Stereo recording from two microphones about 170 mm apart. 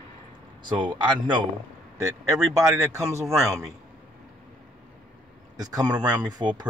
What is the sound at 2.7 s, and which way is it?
Speech, 20° right (ahead or behind).